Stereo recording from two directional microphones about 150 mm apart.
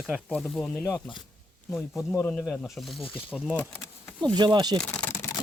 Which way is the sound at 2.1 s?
10° left (ahead or behind).